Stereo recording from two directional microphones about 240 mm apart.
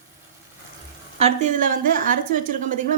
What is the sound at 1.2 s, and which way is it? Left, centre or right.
A woman's voice, right.